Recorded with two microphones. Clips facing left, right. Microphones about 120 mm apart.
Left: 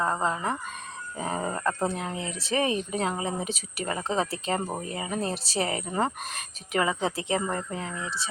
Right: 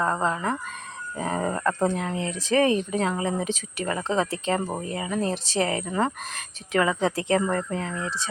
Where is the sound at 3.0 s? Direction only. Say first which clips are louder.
Right 3 dB; 20° left (ahead or behind).